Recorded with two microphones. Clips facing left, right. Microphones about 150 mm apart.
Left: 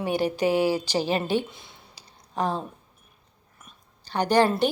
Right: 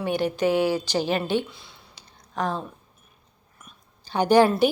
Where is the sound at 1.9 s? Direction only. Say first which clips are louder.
Left 1 dB; 35° left (ahead or behind).